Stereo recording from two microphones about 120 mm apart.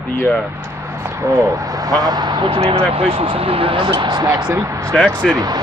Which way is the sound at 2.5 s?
60° right (ahead or behind).